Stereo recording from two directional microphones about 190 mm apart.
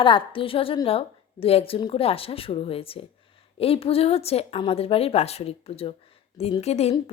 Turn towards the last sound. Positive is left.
turn(degrees=35)  # may be behind; listen again after turning